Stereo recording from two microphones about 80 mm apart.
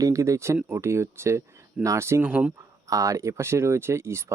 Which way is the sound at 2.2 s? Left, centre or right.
Centre.